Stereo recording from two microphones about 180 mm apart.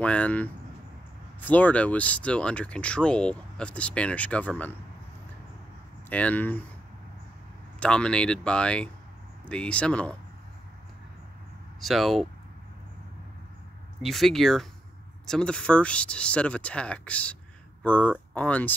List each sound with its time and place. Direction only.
0.0 s speech: 5° left (ahead or behind)
6.0 s speech: 10° left (ahead or behind)
7.8 s speech: 5° left (ahead or behind)
11.8 s speech: centre (ahead or behind)
14.0 s speech: centre (ahead or behind)